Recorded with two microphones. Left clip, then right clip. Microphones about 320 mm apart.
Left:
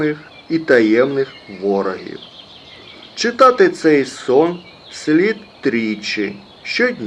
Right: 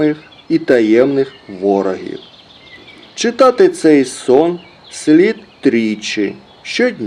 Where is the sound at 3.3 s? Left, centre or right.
Right.